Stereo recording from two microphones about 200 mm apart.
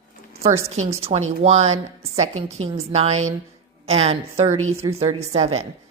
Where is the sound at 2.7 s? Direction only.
30° right (ahead or behind).